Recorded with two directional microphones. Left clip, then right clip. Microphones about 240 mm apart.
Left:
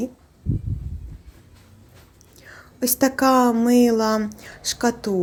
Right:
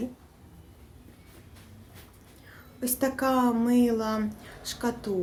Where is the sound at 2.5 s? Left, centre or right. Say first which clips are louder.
Left 9 dB; left.